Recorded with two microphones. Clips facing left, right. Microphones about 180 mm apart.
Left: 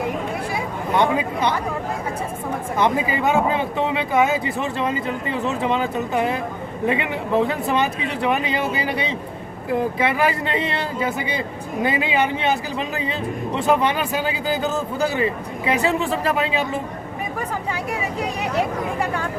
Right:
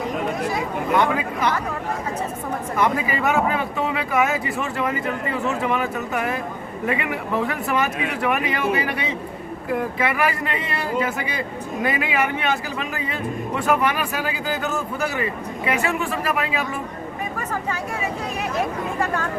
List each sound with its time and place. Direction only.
0.9 s speech: 30° left (ahead or behind)
2.7 s speech: 25° left (ahead or behind)
18.2 s speech: 15° left (ahead or behind)